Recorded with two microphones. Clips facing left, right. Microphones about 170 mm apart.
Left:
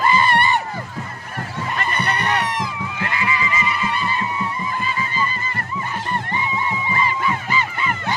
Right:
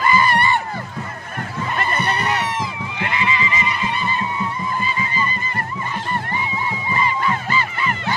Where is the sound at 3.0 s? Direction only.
20° right (ahead or behind).